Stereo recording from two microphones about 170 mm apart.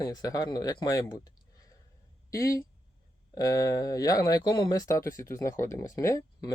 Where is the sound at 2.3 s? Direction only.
20° left (ahead or behind).